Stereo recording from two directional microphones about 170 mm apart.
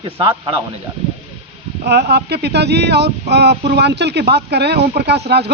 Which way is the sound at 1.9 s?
75° right (ahead or behind).